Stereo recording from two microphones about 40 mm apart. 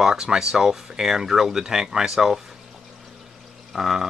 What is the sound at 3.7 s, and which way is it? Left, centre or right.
Speech, centre.